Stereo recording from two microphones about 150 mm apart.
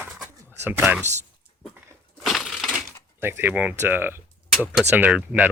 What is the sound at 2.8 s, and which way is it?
Speech, 15° right (ahead or behind).